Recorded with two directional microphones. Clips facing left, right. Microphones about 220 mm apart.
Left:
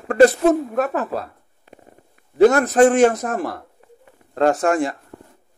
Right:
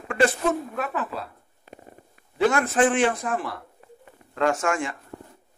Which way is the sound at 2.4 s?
40° left (ahead or behind).